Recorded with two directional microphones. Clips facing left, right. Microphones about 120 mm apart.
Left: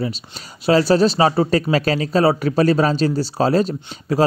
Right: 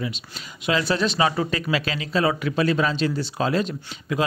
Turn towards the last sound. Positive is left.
turn(degrees=35)  # may be behind; listen again after turning